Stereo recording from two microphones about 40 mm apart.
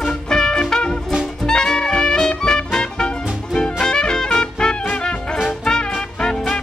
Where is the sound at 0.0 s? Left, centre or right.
Centre.